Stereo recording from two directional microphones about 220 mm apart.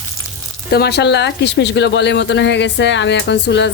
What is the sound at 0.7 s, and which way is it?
Speech, 45° left (ahead or behind).